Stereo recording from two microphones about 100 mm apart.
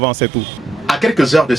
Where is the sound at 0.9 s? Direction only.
Centre (ahead or behind).